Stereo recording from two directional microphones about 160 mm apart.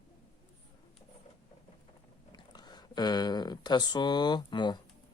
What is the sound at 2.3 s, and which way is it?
Speech, 25° left (ahead or behind).